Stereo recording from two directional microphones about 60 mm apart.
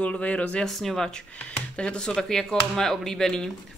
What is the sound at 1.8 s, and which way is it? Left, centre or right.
Speech, centre.